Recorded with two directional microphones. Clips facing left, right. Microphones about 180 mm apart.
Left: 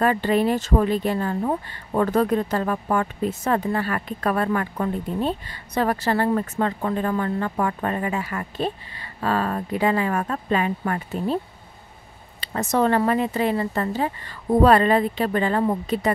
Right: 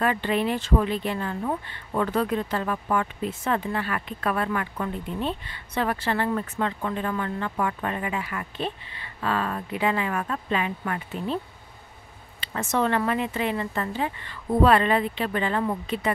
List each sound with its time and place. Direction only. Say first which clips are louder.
0.0 s speech: left 4 dB; 40° left (ahead or behind)
12.4 s speech: left 4 dB; 40° left (ahead or behind)